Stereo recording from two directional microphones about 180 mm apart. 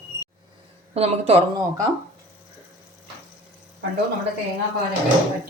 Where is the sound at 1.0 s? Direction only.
35° right (ahead or behind).